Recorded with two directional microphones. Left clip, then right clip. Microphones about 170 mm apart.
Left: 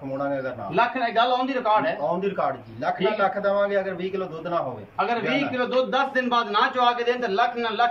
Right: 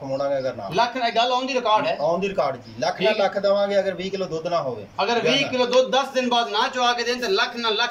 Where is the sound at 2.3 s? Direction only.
15° right (ahead or behind).